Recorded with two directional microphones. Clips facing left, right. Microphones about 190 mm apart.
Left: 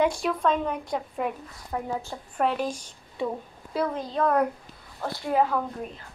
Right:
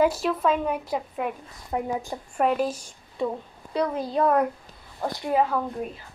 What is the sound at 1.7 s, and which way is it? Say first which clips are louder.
A woman's voice: right 3 dB; 15° right (ahead or behind).